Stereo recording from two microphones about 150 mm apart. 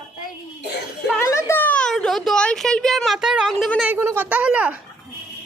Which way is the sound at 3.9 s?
15° right (ahead or behind).